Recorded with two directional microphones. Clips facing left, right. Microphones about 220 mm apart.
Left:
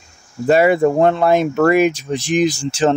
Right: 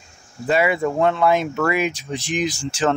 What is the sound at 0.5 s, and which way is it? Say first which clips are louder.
Speech: left 7 dB; 40° left (ahead or behind).